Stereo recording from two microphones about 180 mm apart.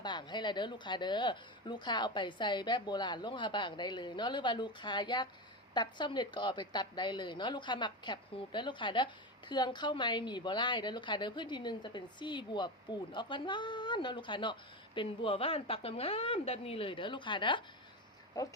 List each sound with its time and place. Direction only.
0.0 s a woman's voice: 25° left (ahead or behind)